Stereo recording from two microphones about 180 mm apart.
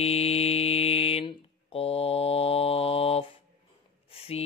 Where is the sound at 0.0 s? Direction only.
35° left (ahead or behind).